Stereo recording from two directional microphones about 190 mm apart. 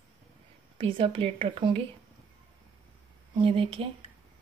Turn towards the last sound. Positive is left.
turn(degrees=-30)  # may be behind; listen again after turning